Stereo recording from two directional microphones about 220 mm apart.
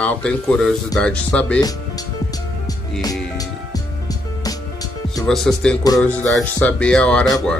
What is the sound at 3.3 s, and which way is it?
Music, 15° left (ahead or behind).